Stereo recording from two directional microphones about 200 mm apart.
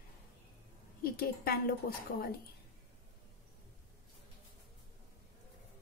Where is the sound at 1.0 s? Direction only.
50° left (ahead or behind).